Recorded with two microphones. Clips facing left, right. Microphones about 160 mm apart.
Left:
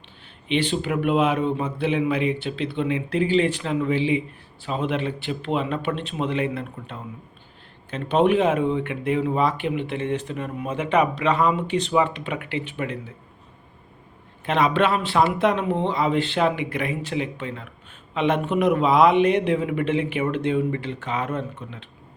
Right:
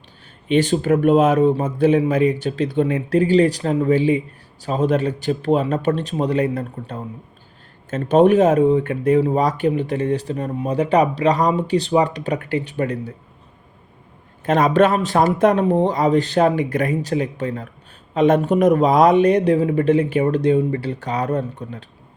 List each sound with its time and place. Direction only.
0.4 s speech: 45° right (ahead or behind)
14.4 s speech: 45° right (ahead or behind)